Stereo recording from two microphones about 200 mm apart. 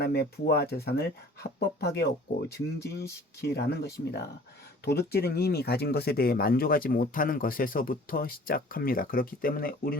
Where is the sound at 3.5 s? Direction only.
55° left (ahead or behind).